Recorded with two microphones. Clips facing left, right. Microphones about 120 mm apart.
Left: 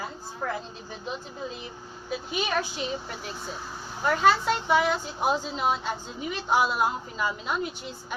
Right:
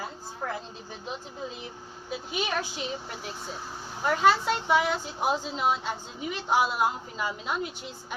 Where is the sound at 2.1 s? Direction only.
15° right (ahead or behind).